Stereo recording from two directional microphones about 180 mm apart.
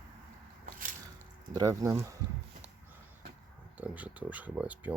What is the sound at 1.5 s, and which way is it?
Speech, 20° right (ahead or behind).